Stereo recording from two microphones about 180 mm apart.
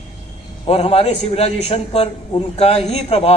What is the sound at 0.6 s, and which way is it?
A man's voice, 35° left (ahead or behind).